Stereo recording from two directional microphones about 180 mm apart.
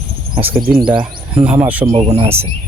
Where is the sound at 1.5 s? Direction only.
10° right (ahead or behind).